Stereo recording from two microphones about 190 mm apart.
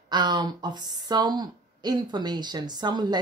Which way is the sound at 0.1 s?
25° right (ahead or behind).